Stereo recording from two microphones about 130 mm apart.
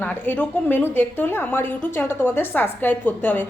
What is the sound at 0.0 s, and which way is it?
A woman's voice, 15° left (ahead or behind).